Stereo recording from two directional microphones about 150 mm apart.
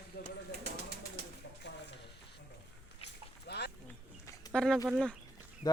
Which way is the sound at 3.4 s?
90° left.